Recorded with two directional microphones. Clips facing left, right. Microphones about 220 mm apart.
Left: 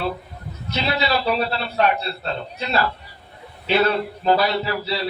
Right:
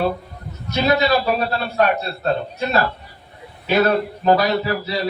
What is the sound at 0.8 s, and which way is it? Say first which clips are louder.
Speech: right 5 dB; 45° right (ahead or behind).